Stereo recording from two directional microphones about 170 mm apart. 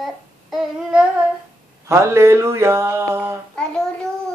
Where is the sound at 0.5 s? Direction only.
5° right (ahead or behind).